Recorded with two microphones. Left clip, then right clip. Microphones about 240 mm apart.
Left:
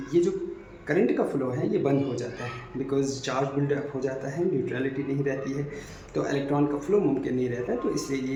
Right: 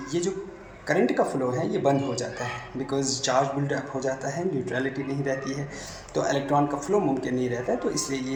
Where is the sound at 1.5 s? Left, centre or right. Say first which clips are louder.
Right 1 dB; centre.